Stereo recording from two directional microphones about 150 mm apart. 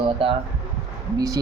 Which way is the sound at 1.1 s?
25° right (ahead or behind).